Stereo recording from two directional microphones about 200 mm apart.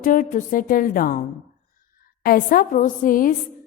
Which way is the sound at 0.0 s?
40° left (ahead or behind).